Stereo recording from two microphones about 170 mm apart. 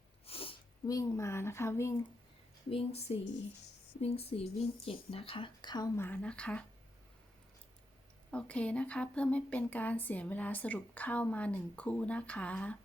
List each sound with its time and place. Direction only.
0.3 s sneeze: 35° left (ahead or behind)
0.9 s speech: 20° left (ahead or behind)
2.6 s speech: 35° left (ahead or behind)
6.0 s speech: 10° left (ahead or behind)
8.3 s speech: 5° left (ahead or behind)